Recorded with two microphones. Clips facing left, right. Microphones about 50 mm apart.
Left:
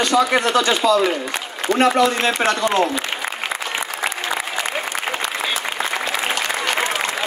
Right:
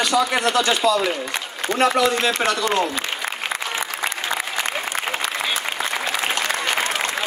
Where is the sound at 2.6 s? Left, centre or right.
Centre.